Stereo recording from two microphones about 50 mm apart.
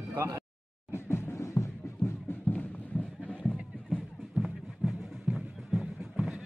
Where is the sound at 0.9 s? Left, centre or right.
Left.